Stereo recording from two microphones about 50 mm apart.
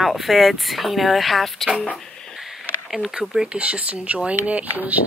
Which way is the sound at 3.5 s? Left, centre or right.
Right.